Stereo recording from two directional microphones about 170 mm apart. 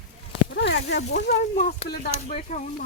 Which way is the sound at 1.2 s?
50° left (ahead or behind).